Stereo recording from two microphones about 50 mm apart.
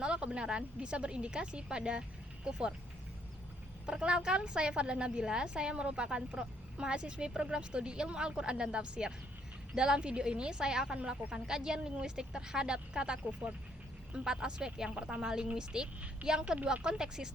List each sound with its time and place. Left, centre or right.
0.0 s a woman's voice: centre
3.8 s a woman's voice: centre